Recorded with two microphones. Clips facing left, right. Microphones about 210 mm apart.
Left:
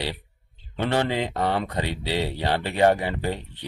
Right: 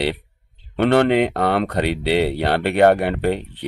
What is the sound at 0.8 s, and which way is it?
Speech, 65° right (ahead or behind).